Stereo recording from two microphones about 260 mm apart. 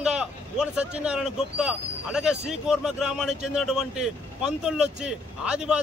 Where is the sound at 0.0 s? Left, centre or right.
Centre.